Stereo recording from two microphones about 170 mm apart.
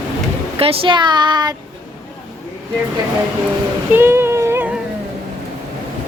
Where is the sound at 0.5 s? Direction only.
30° right (ahead or behind).